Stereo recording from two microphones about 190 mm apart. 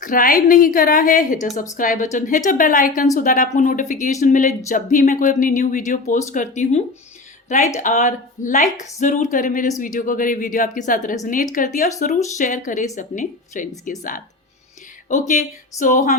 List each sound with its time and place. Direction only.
0.0 s a woman's voice: 45° left (ahead or behind)
15.8 s speech: 40° left (ahead or behind)